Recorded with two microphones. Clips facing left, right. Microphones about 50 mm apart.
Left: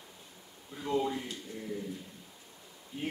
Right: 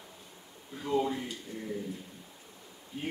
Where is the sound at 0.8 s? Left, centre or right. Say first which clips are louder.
Right 1 dB; centre.